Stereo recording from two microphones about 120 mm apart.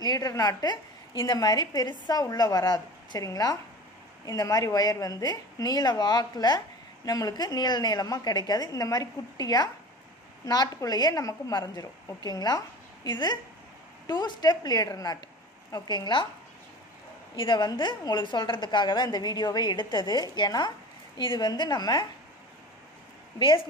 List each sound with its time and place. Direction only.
0.0 s a woman's voice: 30° left (ahead or behind)
17.4 s a woman's voice: 40° left (ahead or behind)